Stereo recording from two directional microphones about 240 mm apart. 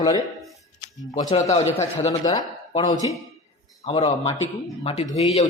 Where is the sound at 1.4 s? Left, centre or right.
Left.